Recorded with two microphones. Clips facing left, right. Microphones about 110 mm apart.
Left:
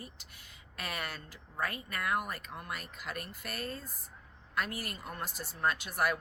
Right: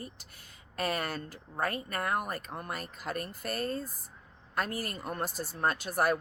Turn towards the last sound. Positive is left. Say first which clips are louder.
# right 3 dB
turn(degrees=-40)  # may be behind; listen again after turning